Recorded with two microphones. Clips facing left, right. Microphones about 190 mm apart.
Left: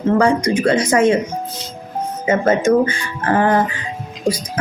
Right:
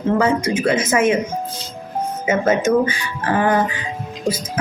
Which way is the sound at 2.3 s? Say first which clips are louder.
Left 2 dB; 10° right (ahead or behind).